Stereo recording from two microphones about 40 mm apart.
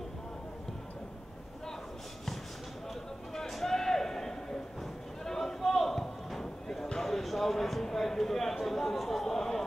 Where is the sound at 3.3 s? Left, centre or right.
Centre.